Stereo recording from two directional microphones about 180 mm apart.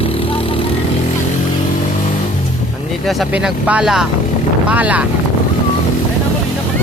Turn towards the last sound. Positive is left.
turn(degrees=-10)  # may be behind; listen again after turning